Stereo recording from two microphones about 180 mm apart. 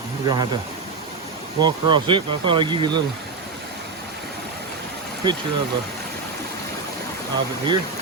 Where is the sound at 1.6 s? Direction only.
25° right (ahead or behind).